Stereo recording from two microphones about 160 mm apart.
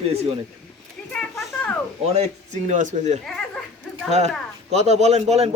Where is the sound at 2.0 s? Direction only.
45° right (ahead or behind).